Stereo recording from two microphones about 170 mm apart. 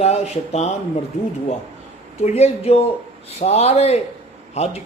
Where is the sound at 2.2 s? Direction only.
40° left (ahead or behind).